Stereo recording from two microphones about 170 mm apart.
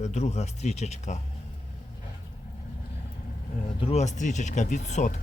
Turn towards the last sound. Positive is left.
turn(degrees=45)  # may be behind; listen again after turning